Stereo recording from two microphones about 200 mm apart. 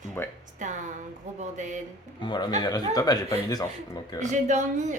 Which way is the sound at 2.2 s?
20° left (ahead or behind).